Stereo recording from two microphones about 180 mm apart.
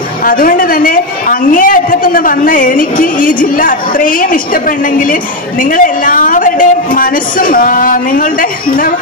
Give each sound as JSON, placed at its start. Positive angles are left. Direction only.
{"t": 0.2, "sound": "a woman's voice", "side_deg": 50}